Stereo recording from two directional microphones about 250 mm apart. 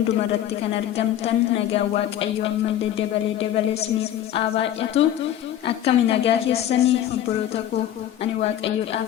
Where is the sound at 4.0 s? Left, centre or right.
Left.